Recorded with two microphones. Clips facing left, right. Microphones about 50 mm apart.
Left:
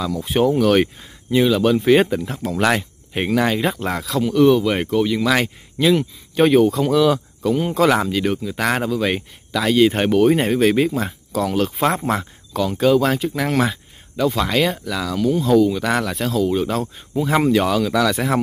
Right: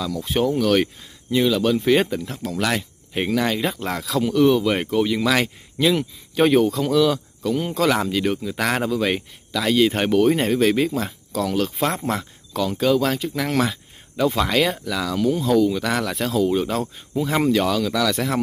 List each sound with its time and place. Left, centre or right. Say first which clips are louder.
0.0 s speech: left 3 dB; centre
2.5 s speech: left 5 dB; left
2.8 s speech: left 1 dB; left
4.0 s speech: left 2 dB; centre
8.1 s speech: left 1 dB; centre
14.1 s speech: left 1 dB; centre
17.2 s speech: left 3 dB; centre